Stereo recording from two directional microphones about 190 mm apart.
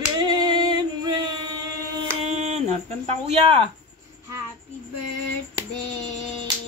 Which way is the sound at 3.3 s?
30° right (ahead or behind).